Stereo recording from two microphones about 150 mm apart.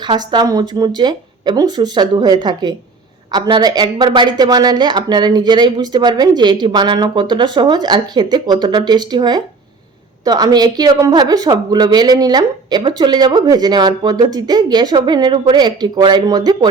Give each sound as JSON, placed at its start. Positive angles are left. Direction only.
{"t": 0.0, "sound": "a woman's voice", "side_deg": -30}